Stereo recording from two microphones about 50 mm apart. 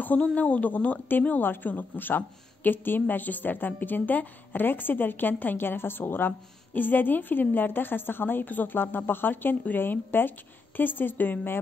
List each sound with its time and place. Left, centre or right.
0.0 s a woman's voice: left